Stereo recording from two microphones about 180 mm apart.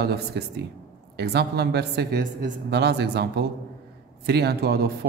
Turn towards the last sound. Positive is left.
turn(degrees=-65)  # may be behind; listen again after turning